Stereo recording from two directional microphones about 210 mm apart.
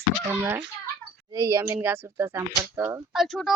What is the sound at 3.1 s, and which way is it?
Speech, centre (ahead or behind).